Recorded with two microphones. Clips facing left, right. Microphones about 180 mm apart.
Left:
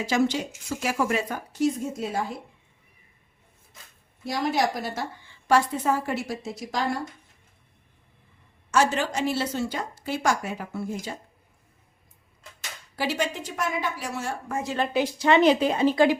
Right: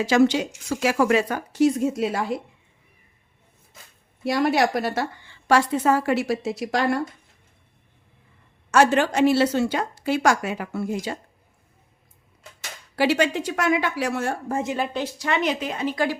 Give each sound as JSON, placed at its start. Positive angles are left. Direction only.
{"t": 0.0, "sound": "speech", "side_deg": -85}
{"t": 4.2, "sound": "a woman's voice", "side_deg": -65}
{"t": 8.7, "sound": "a woman's voice", "side_deg": -65}
{"t": 13.0, "sound": "a woman's voice", "side_deg": -75}
{"t": 15.2, "sound": "speech", "side_deg": 30}